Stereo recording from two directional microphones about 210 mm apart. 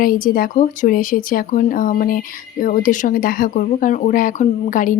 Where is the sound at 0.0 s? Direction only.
40° left (ahead or behind).